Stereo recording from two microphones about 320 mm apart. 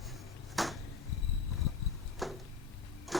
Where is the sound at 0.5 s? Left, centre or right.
Centre.